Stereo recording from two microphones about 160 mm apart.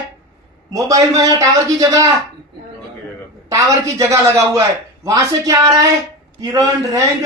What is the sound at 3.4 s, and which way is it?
Speech, 20° right (ahead or behind).